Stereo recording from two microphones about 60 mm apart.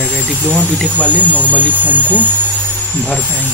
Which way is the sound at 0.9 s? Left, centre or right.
Left.